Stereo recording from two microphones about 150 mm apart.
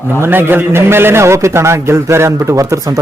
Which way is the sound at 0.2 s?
15° right (ahead or behind).